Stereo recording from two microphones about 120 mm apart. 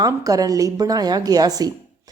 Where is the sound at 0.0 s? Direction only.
30° right (ahead or behind).